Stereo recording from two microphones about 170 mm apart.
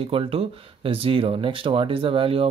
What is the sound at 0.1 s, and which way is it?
Speech, 35° right (ahead or behind).